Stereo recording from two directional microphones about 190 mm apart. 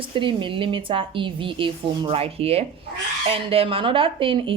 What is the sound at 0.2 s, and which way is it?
Speech, 25° right (ahead or behind).